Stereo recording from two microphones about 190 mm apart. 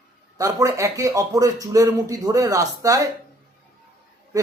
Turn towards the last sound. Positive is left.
turn(degrees=-20)  # may be behind; listen again after turning